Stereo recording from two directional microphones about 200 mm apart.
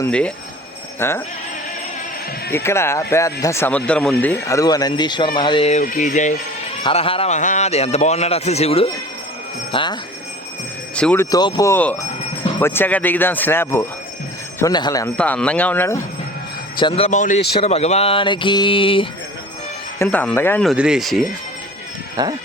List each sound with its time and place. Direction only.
0.0 s speech: 5° left (ahead or behind)
2.6 s speech: 15° left (ahead or behind); by 6.3 s 40° left (ahead or behind)
6.8 s a man's voice: 25° left (ahead or behind)
9.7 s a sound: 20° left (ahead or behind)
10.9 s speech: 5° left (ahead or behind)
14.6 s a sound: 20° left (ahead or behind)
15.2 s speech: 5° left (ahead or behind)
16.7 s a man's voice: 25° left (ahead or behind)
17.6 s a sound: 30° left (ahead or behind)
20.0 s speech: 5° left (ahead or behind)
22.1 s speech: 20° right (ahead or behind)